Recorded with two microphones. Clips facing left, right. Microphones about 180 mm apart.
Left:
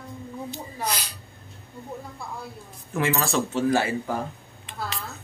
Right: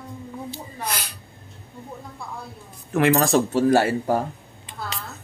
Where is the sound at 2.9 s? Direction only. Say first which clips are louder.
Right 7 dB; 65° right (ahead or behind).